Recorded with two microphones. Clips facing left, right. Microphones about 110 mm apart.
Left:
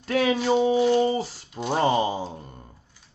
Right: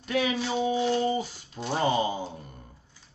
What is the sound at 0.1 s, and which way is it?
Speech, 45° left (ahead or behind).